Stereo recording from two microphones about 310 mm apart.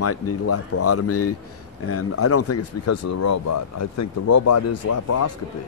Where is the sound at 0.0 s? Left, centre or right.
Left.